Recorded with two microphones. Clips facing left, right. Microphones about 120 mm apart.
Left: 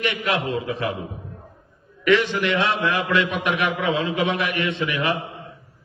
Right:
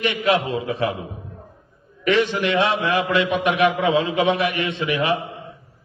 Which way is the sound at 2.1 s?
20° right (ahead or behind).